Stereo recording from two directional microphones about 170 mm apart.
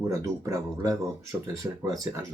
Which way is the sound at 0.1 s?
20° right (ahead or behind).